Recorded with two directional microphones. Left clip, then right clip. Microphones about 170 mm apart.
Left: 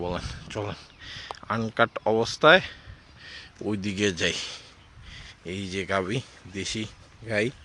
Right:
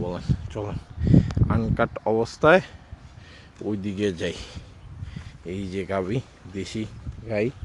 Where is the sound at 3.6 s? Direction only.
15° left (ahead or behind).